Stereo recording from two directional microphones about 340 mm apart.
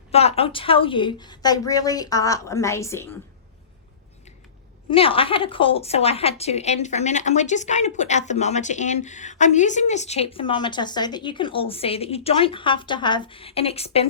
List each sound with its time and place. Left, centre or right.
0.1 s a woman's voice: centre
4.9 s a woman's voice: centre